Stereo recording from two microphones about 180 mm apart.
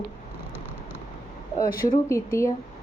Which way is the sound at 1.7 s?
50° left (ahead or behind).